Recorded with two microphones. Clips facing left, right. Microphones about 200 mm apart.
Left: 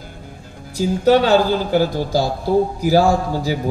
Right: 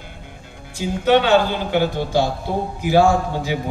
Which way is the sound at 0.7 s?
40° left (ahead or behind).